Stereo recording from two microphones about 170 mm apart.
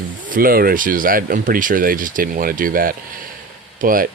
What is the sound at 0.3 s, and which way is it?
Speech, 55° right (ahead or behind).